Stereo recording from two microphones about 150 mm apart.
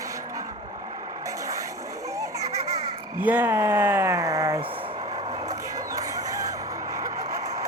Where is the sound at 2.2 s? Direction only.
20° right (ahead or behind).